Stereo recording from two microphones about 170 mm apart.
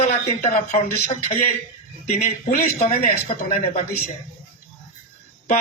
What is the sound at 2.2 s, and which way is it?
Speech, 55° left (ahead or behind).